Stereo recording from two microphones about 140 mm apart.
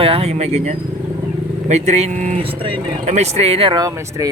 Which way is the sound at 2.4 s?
40° right (ahead or behind).